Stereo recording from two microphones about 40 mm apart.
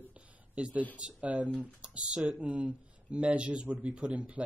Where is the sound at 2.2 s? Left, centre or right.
Right.